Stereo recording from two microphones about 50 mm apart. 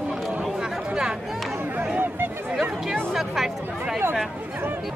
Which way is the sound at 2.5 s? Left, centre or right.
Centre.